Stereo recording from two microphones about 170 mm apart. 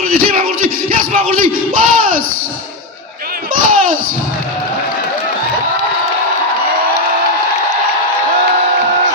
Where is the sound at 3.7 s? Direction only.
50° right (ahead or behind).